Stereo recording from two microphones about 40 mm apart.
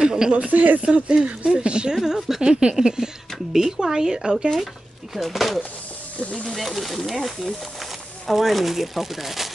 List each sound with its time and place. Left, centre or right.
0.0 s speech: centre
0.5 s speech: right
0.8 s speech: right
2.1 s speech: centre
2.4 s speech: right
5.1 s speech: centre
6.1 s speech: left
6.5 s speech: centre